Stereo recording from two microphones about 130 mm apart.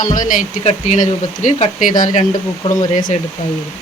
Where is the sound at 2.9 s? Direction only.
80° left.